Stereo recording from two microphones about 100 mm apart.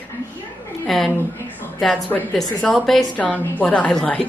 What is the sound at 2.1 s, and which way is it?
Speech, 10° left (ahead or behind).